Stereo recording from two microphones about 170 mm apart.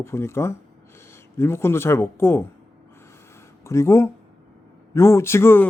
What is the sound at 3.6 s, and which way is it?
Speech, 15° left (ahead or behind).